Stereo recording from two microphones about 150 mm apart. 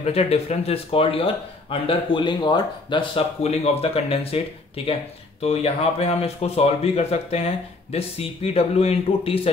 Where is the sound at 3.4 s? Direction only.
45° left (ahead or behind).